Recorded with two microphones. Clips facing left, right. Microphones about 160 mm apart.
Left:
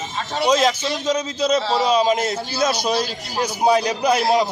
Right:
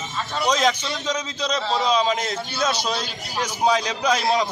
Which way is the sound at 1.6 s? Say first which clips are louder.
Left 4 dB; 30° left (ahead or behind).